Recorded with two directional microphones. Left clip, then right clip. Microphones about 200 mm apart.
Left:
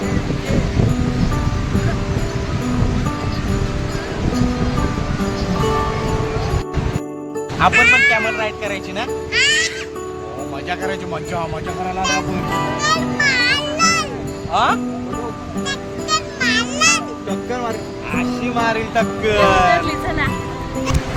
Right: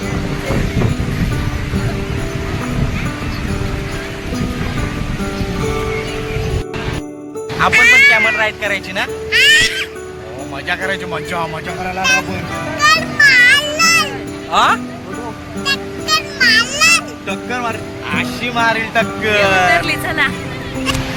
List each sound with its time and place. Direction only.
7.7 s a man's voice: 5° left (ahead or behind)
8.1 s speech: 5° right (ahead or behind)
9.3 s music: 5° left (ahead or behind)
10.7 s a man's voice: 5° right (ahead or behind)
11.9 s speech: 10° left (ahead or behind)
12.8 s music: 15° left (ahead or behind)
14.5 s speech: 10° right (ahead or behind)
15.6 s music: 10° left (ahead or behind)
17.2 s music: centre (ahead or behind)
18.1 s speech: centre (ahead or behind)
19.9 s speech: 15° left (ahead or behind)